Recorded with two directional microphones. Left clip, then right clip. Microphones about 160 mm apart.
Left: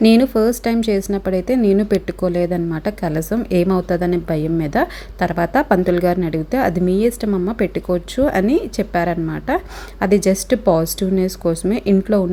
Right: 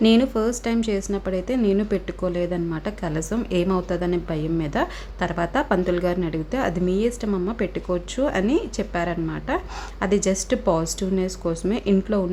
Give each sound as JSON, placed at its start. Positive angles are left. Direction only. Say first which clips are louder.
{"t": 0.0, "sound": "a woman's voice", "louder": "left 6 dB", "side_deg": 30}